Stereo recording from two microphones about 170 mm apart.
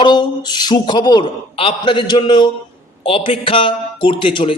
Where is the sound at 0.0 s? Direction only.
25° left (ahead or behind).